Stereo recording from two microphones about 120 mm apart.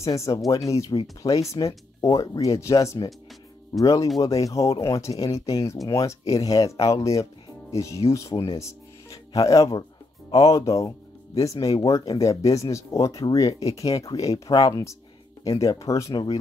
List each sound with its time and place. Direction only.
0.3 s speech: 40° left (ahead or behind)
0.7 s speech: 30° left (ahead or behind)